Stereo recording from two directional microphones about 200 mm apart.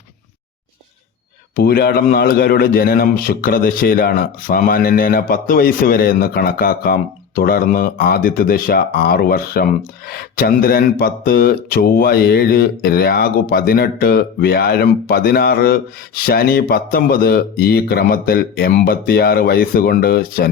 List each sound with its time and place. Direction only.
1.5 s speech: 50° left (ahead or behind)